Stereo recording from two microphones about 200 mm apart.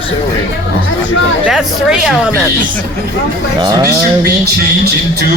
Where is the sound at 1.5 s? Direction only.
5° right (ahead or behind).